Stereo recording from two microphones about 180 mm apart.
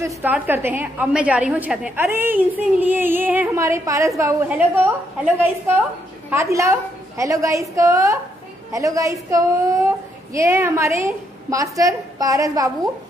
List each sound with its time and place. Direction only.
0.0 s a woman's voice: 10° right (ahead or behind)